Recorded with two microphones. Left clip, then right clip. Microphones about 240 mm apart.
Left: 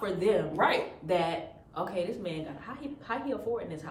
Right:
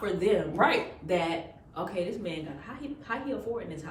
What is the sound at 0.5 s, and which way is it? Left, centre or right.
Speech, centre.